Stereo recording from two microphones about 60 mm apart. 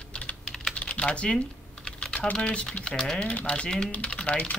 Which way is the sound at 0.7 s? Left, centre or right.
Left.